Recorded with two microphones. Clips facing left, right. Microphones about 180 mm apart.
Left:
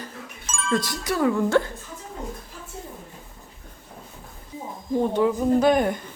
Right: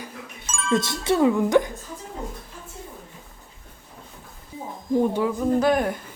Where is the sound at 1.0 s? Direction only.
25° right (ahead or behind).